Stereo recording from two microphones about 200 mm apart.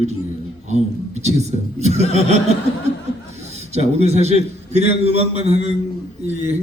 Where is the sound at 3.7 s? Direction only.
35° right (ahead or behind).